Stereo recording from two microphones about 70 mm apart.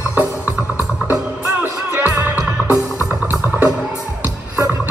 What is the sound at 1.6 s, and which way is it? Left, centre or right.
Music, right.